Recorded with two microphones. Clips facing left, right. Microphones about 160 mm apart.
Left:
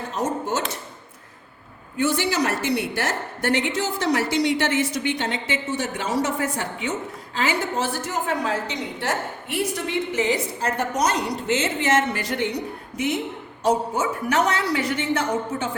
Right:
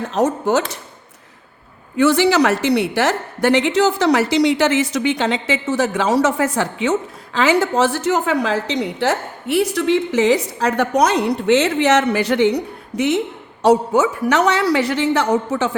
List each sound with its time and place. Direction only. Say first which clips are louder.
0.1 s a woman's voice: right 8 dB; 80° right
2.0 s a woman's voice: right 8 dB; 85° right